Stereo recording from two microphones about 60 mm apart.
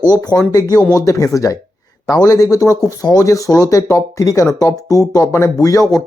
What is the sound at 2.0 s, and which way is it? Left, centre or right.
Speech, left.